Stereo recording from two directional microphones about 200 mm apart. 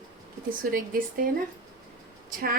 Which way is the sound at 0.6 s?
45° right (ahead or behind).